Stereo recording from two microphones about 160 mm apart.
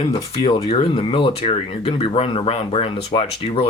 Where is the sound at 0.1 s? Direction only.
30° left (ahead or behind).